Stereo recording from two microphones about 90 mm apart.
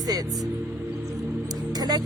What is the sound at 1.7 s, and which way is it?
Music, 45° right (ahead or behind).